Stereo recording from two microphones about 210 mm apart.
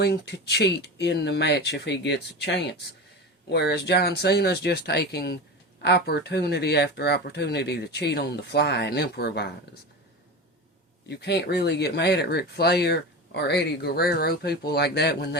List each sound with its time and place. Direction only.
0.0 s speech: 50° left (ahead or behind)
11.1 s speech: 50° left (ahead or behind)